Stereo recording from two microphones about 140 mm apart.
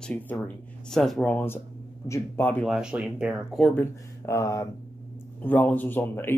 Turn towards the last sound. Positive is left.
turn(degrees=15)  # may be behind; listen again after turning